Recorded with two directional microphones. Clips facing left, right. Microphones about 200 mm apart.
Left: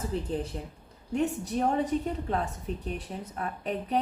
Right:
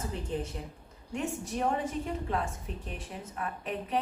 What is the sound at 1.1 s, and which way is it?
Speech, 35° left (ahead or behind).